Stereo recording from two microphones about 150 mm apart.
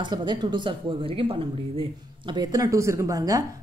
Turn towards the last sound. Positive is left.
turn(degrees=-25)  # may be behind; listen again after turning